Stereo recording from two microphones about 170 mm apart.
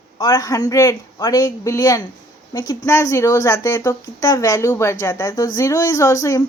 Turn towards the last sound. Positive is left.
turn(degrees=20)  # may be behind; listen again after turning